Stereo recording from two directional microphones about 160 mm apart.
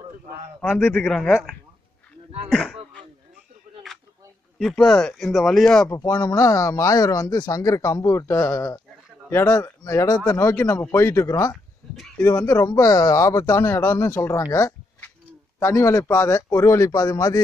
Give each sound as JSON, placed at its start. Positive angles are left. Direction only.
{"t": 0.6, "sound": "a man's voice", "side_deg": 10}
{"t": 4.6, "sound": "speech", "side_deg": 5}
{"t": 5.9, "sound": "a man's voice", "side_deg": 15}
{"t": 14.5, "sound": "a sound", "side_deg": 15}
{"t": 15.6, "sound": "speech", "side_deg": 20}